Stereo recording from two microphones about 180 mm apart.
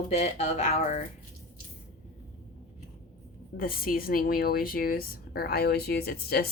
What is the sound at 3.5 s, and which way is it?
Speech, 55° left (ahead or behind).